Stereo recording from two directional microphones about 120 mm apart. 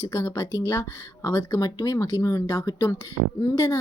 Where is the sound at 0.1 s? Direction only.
25° left (ahead or behind).